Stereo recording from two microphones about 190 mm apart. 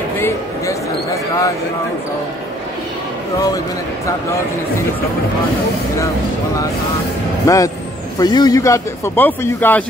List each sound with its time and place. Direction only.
7.4 s speech: 15° left (ahead or behind)